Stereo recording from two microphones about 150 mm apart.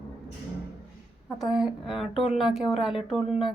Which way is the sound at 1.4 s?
5° right (ahead or behind).